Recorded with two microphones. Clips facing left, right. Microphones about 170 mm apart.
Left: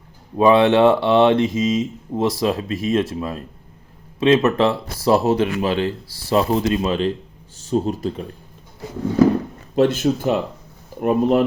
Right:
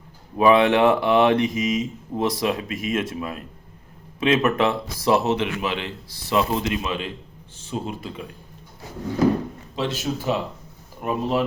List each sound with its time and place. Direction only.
0.3 s speech: 25° left (ahead or behind)
9.7 s speech: 50° left (ahead or behind)